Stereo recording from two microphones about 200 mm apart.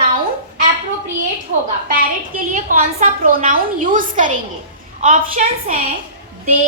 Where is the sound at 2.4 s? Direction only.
40° right (ahead or behind).